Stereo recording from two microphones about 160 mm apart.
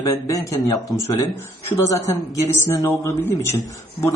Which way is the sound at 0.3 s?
20° left (ahead or behind).